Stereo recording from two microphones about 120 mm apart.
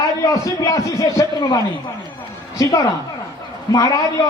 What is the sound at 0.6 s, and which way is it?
A man's voice, 25° left (ahead or behind).